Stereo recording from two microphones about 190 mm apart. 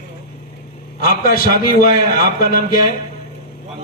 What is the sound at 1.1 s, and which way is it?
Speech, 50° left (ahead or behind).